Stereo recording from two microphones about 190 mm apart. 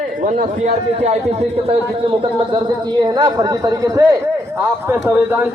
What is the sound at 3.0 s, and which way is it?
Speech, 20° right (ahead or behind).